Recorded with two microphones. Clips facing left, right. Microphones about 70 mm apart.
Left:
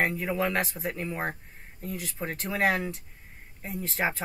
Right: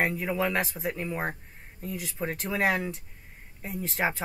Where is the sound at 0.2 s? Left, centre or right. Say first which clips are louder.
Even; centre.